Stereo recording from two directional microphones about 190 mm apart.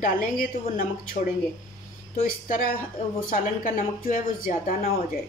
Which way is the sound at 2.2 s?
45° left (ahead or behind).